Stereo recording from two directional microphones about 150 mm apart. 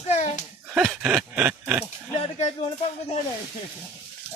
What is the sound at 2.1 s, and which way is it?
Speech, 40° left (ahead or behind).